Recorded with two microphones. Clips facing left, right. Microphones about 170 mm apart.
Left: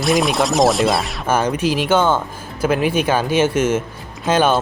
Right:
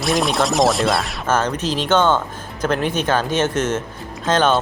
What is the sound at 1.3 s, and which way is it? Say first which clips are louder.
Speech: left 2 dB; 10° left (ahead or behind).